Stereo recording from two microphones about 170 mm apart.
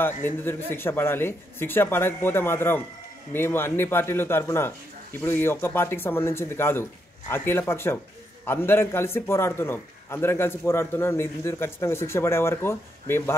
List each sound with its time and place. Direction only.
0.2 s a man's voice: 15° left (ahead or behind)